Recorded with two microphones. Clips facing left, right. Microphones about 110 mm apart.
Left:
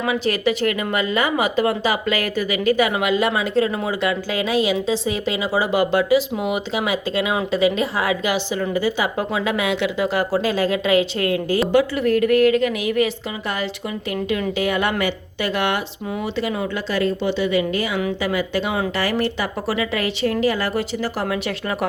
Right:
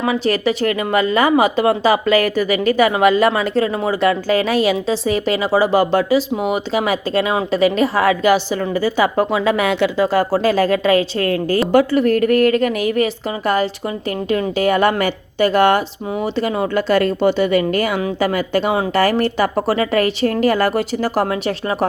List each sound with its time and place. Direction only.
0.0 s a woman's voice: 35° right (ahead or behind)
14.3 s a woman's voice: 40° right (ahead or behind)